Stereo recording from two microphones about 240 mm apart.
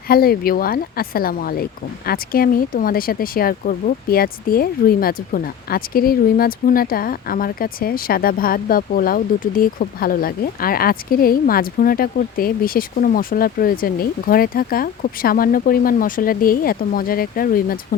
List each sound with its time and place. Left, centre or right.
0.1 s speech: left